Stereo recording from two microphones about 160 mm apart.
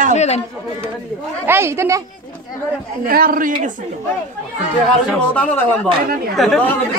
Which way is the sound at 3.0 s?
65° right (ahead or behind).